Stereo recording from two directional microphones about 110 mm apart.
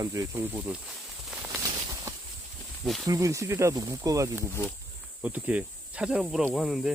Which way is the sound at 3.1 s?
30° right (ahead or behind).